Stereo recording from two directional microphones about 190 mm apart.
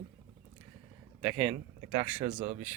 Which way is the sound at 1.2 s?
5° right (ahead or behind).